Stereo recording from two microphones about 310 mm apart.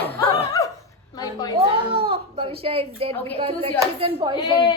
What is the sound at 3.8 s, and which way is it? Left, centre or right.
Speech, centre.